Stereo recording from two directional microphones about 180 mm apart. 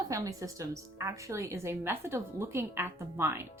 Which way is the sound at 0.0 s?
20° right (ahead or behind).